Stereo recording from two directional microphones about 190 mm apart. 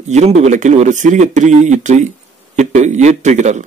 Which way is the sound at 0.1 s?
35° right (ahead or behind).